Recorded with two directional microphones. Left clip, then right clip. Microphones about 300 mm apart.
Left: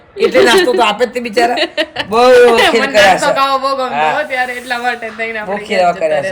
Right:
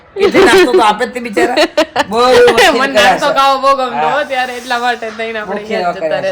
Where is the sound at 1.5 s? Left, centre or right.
Right.